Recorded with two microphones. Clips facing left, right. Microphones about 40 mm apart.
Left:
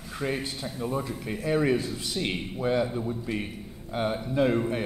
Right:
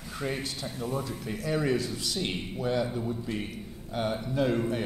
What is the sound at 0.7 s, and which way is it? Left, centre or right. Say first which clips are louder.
A man's voice: left 3 dB; left.